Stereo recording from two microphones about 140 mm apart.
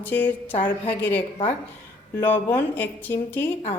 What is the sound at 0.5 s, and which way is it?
Speech, 40° left (ahead or behind).